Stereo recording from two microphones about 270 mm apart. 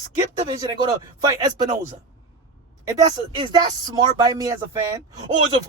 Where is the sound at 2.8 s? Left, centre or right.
Centre.